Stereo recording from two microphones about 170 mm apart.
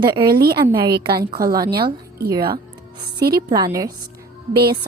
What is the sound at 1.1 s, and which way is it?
Speech, 60° right (ahead or behind).